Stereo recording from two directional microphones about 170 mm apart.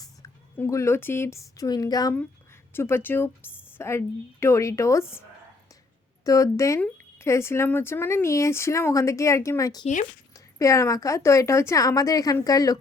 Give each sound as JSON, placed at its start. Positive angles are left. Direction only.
{"t": 0.0, "sound": "speech", "side_deg": 15}
{"t": 6.2, "sound": "a woman's voice", "side_deg": 20}
{"t": 9.8, "sound": "speech", "side_deg": 45}
{"t": 10.3, "sound": "a woman's voice", "side_deg": 20}